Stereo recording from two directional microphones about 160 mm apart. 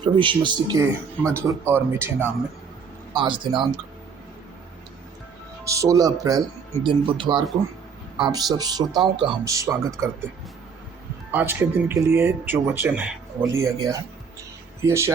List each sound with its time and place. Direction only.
0.0 s speech: 30° right (ahead or behind)
1.4 s speech: 15° right (ahead or behind)
3.1 s speech: 30° right (ahead or behind)
5.6 s speech: 20° right (ahead or behind)
11.3 s speech: 10° right (ahead or behind)